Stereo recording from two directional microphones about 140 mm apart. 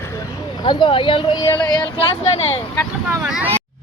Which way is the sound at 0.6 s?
35° left (ahead or behind).